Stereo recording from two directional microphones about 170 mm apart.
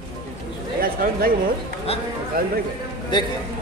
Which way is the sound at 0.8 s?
60° right (ahead or behind).